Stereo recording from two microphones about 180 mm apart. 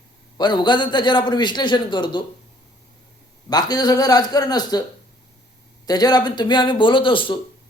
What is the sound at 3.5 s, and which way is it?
A man's voice, 20° left (ahead or behind).